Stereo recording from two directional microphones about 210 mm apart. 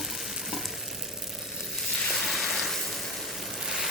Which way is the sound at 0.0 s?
Centre (ahead or behind).